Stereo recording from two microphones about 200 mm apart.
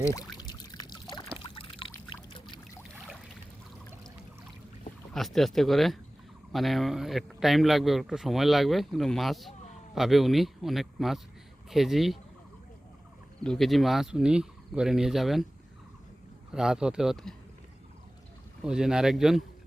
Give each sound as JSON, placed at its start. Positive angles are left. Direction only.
{"t": 0.0, "sound": "pour", "side_deg": 15}
{"t": 2.9, "sound": "boat", "side_deg": 0}
{"t": 5.1, "sound": "speech", "side_deg": 0}
{"t": 13.4, "sound": "speech", "side_deg": 0}
{"t": 16.5, "sound": "speech", "side_deg": -5}
{"t": 18.6, "sound": "speech", "side_deg": -5}